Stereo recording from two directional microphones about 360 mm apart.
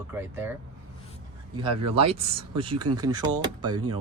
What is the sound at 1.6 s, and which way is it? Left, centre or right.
Speech, centre.